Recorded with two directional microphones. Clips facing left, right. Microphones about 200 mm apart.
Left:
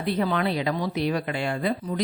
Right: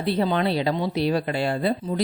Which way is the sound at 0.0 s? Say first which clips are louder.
Right 2 dB; 30° right (ahead or behind).